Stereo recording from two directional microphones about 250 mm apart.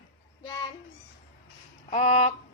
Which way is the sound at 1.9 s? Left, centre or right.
Left.